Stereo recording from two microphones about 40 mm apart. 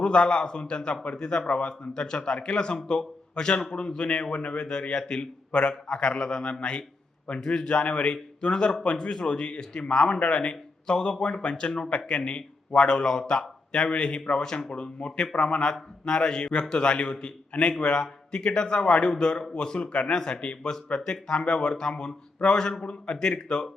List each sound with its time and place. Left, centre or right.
0.0 s a man's voice: left
14.7 s a man's voice: left